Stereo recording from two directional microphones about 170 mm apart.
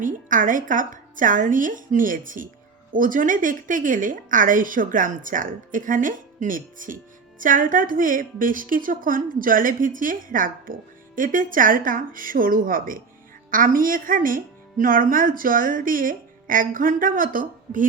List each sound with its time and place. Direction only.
0.0 s a woman's voice: 50° right (ahead or behind)